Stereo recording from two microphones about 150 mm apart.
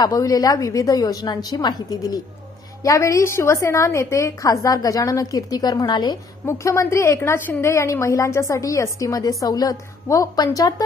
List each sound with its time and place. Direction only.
0.0 s a woman's voice: 25° left (ahead or behind)
6.4 s a woman's voice: 20° left (ahead or behind)